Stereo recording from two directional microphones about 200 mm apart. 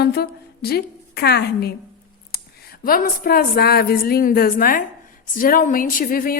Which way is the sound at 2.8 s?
45° left (ahead or behind).